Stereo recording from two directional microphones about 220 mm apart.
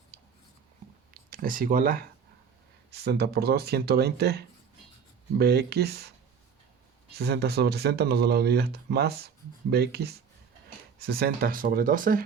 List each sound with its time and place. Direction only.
1.3 s speech: 40° right (ahead or behind)
7.2 s speech: 45° right (ahead or behind)